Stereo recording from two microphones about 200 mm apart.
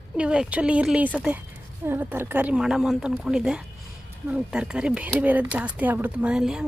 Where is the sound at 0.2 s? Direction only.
5° right (ahead or behind).